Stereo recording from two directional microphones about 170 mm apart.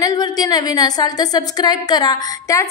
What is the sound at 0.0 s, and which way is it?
A woman's voice, 20° left (ahead or behind).